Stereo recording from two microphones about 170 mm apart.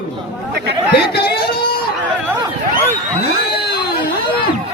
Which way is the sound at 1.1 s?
65° left (ahead or behind).